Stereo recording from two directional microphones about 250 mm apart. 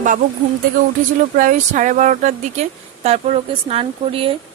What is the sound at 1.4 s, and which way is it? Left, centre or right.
A woman's voice, right.